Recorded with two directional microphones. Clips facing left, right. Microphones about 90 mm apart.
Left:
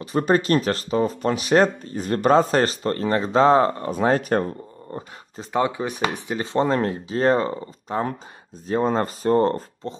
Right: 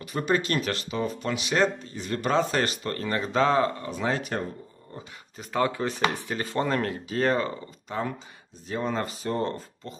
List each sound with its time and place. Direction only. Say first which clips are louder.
0.0 s speech: left 6 dB; 35° left (ahead or behind)
5.4 s speech: left 3 dB; 20° left (ahead or behind); by 9.9 s 40° left (ahead or behind)